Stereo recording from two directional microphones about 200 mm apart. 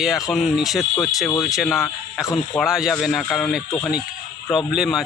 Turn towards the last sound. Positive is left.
turn(degrees=0)  # may be behind; listen again after turning